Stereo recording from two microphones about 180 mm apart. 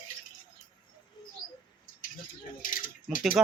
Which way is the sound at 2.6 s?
50° left (ahead or behind).